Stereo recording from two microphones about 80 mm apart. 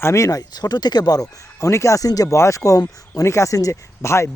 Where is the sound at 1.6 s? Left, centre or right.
Left.